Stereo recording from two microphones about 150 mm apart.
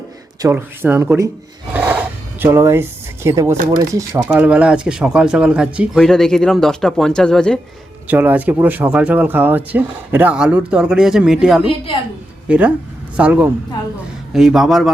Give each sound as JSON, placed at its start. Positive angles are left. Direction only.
{"t": 0.4, "sound": "speech", "side_deg": -15}
{"t": 1.7, "sound": "zipper", "side_deg": -10}
{"t": 3.7, "sound": "speech", "side_deg": -25}
{"t": 4.2, "sound": "speech", "side_deg": -10}
{"t": 8.0, "sound": "speech", "side_deg": -10}